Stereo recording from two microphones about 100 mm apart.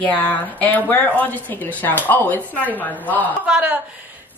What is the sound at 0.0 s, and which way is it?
Speech, 15° left (ahead or behind).